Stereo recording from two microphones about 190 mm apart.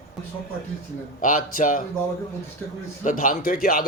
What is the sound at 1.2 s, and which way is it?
Speech, 45° left (ahead or behind).